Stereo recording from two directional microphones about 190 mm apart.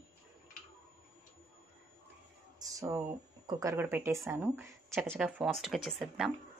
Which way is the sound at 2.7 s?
15° right (ahead or behind).